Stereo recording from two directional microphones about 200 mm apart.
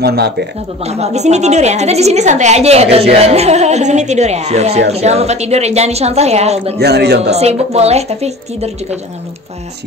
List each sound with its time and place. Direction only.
0.0 s speech: 55° right (ahead or behind)
0.8 s a woman's voice: 30° right (ahead or behind)
6.8 s a man's voice: 55° right (ahead or behind)
7.3 s a woman's voice: 30° right (ahead or behind)